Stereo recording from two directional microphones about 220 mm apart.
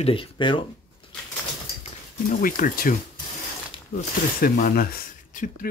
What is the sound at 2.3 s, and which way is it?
Speech, 35° left (ahead or behind).